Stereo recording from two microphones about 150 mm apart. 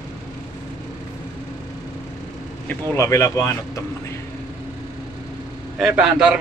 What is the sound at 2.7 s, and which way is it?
Speech, 15° left (ahead or behind).